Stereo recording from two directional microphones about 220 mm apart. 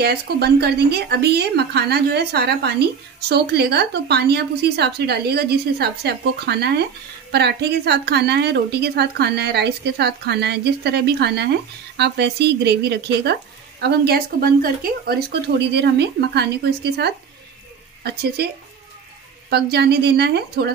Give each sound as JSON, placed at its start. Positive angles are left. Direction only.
{"t": 0.0, "sound": "speech", "side_deg": -45}
{"t": 19.5, "sound": "speech", "side_deg": -50}